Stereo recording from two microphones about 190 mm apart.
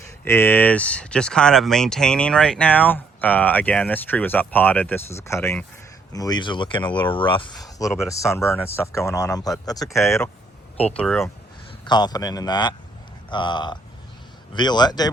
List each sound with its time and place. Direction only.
0.3 s speech: 10° left (ahead or behind)
10.8 s speech: 5° left (ahead or behind)
11.9 s speech: 20° left (ahead or behind)